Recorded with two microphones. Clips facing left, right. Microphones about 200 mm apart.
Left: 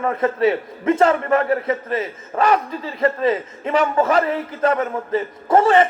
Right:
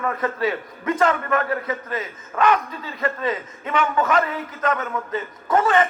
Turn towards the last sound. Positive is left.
turn(degrees=30)  # may be behind; listen again after turning